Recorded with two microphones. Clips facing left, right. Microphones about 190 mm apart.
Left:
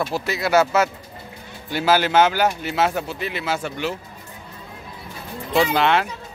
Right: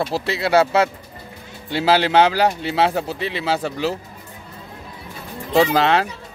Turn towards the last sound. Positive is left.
turn(degrees=-35)  # may be behind; listen again after turning